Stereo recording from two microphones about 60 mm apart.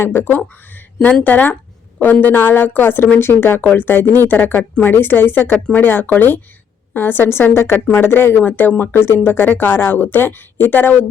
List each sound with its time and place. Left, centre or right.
0.0 s speech: left
3.6 s a woman's voice: left